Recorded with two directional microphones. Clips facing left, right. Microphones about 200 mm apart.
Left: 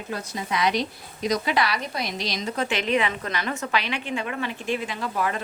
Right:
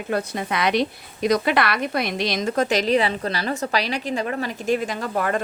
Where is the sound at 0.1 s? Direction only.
60° right (ahead or behind).